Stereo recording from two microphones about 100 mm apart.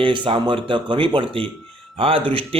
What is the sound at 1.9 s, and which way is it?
Speech, 65° right (ahead or behind).